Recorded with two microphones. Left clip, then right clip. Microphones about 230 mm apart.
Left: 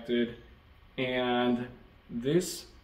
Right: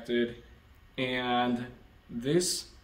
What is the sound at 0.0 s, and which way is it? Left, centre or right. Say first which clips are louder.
Speech: right 1 dB; centre.